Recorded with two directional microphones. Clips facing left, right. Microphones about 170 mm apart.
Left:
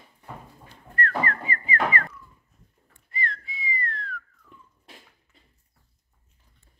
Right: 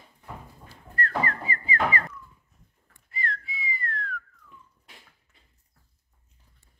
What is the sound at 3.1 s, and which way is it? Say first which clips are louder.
Whistling: left 1 dB; centre (ahead or behind).